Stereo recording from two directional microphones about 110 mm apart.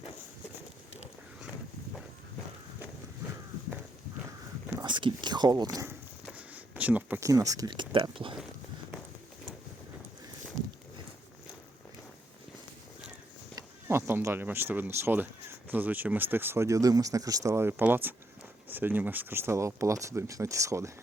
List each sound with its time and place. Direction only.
4.8 s speech: 45° right (ahead or behind)
6.3 s a sound: 15° right (ahead or behind)
7.2 s speech: 30° right (ahead or behind); by 8.4 s 50° right (ahead or behind)
13.8 s speech: 20° right (ahead or behind)